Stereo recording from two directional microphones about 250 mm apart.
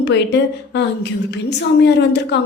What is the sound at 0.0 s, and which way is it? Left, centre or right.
Speech, left.